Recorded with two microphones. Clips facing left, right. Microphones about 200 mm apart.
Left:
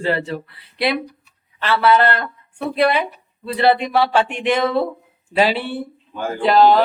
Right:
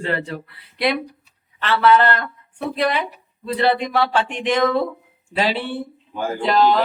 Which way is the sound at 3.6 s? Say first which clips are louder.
Left 3 dB; 10° left (ahead or behind).